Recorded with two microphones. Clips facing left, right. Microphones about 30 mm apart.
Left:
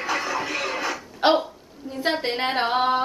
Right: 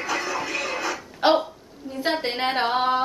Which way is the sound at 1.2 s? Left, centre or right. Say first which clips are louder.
Even; centre.